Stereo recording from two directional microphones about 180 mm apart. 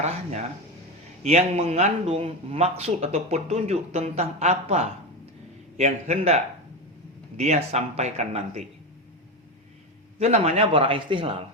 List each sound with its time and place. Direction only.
1.2 s a man's voice: 35° right (ahead or behind)
10.2 s a man's voice: 35° right (ahead or behind)